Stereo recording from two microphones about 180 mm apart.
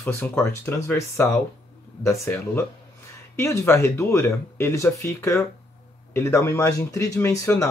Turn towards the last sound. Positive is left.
turn(degrees=15)  # may be behind; listen again after turning